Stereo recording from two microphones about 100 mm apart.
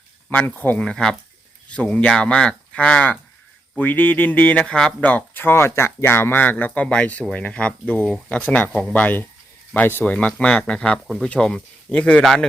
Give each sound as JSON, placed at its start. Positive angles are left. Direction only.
{"t": 0.3, "sound": "speech", "side_deg": 20}
{"t": 12.2, "sound": "speech", "side_deg": 0}